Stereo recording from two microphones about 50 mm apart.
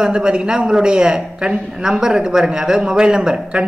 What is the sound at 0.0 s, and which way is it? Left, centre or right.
A man's voice, centre.